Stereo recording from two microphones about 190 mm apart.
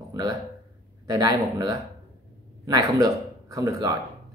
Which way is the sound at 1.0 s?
20° right (ahead or behind).